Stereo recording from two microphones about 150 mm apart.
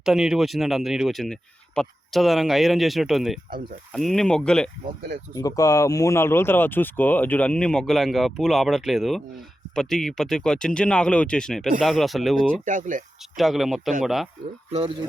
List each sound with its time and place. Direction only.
0.0 s speech: 5° right (ahead or behind)
5.3 s speech: 25° left (ahead or behind); by 12.6 s 5° left (ahead or behind)
12.6 s speech: 60° right (ahead or behind)
13.3 s speech: centre (ahead or behind)
14.7 s speech: 40° right (ahead or behind)